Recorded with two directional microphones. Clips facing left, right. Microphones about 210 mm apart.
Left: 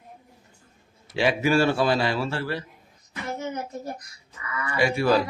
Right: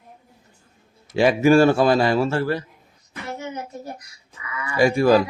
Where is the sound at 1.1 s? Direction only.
45° right (ahead or behind).